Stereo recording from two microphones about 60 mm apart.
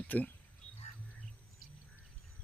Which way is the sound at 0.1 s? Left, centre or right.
Left.